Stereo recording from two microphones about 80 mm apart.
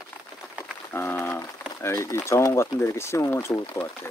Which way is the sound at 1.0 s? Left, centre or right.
Left.